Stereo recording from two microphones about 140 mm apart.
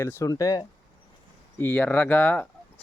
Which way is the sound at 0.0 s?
20° left (ahead or behind).